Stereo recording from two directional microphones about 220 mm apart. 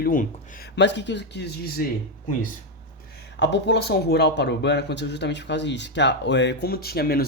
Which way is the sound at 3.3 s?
50° left (ahead or behind).